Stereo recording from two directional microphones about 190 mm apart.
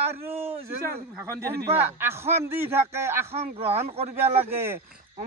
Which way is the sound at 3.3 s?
30° right (ahead or behind).